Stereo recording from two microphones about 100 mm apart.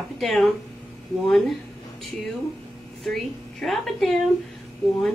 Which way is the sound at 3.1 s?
Centre (ahead or behind).